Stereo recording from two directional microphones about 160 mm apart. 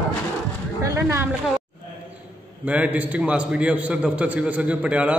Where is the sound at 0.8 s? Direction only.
20° right (ahead or behind).